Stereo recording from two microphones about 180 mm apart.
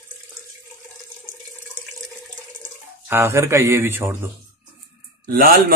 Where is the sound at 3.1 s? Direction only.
15° right (ahead or behind).